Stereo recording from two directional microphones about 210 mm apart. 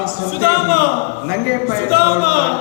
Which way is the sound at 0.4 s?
45° left (ahead or behind).